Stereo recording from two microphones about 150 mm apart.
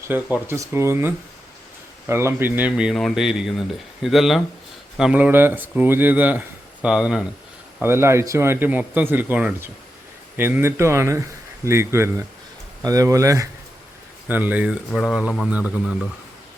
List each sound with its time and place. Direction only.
0.1 s a man's voice: 15° right (ahead or behind)
7.8 s a man's voice: 15° right (ahead or behind)